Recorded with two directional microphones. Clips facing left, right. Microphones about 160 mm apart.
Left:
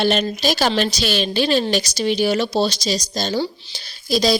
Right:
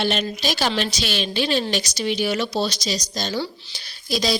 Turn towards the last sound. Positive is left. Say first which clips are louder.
# left 5 dB
turn(degrees=35)  # may be behind; listen again after turning